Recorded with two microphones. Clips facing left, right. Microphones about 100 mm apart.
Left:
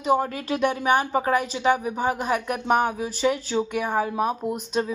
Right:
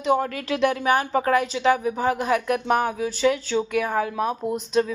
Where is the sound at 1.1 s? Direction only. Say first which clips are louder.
Right 2 dB; 10° left (ahead or behind).